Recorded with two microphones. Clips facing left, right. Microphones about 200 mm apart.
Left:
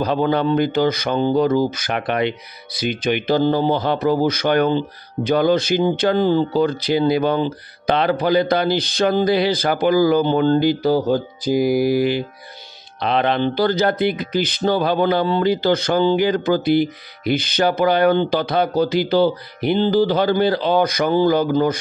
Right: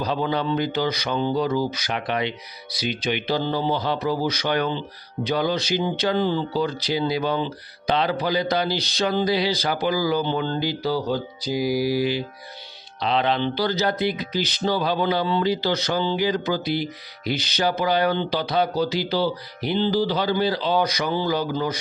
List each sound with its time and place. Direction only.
0.0 s speech: 55° left (ahead or behind)